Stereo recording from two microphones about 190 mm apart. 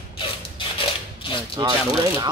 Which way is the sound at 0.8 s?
25° left (ahead or behind).